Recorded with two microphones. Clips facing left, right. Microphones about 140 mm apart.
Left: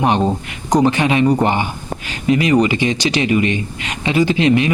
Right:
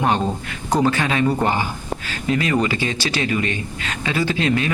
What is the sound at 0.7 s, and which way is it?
Speech, 15° left (ahead or behind).